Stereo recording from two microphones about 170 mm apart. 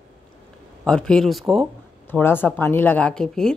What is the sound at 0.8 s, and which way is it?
Speech, 5° left (ahead or behind).